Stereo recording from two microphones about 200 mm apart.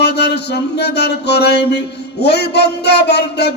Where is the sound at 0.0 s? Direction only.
55° left (ahead or behind).